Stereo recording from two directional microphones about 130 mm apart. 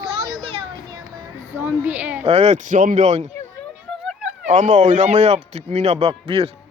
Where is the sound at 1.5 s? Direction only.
15° right (ahead or behind).